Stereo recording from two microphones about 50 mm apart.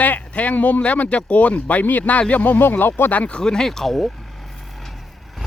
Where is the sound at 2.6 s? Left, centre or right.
Left.